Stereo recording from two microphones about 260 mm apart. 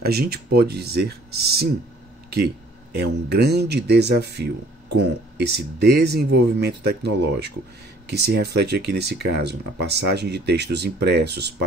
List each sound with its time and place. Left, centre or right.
0.0 s speech: right